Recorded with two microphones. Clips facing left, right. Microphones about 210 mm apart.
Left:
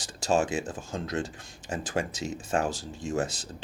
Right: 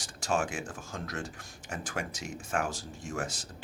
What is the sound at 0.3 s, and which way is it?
Speech, 25° left (ahead or behind).